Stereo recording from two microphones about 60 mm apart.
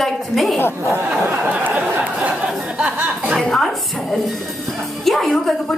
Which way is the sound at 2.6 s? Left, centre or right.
Centre.